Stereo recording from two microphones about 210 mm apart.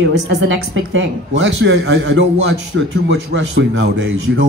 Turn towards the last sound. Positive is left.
turn(degrees=-60)  # may be behind; listen again after turning